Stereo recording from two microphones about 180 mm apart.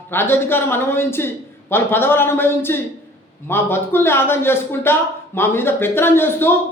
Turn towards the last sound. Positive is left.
turn(degrees=10)  # may be behind; listen again after turning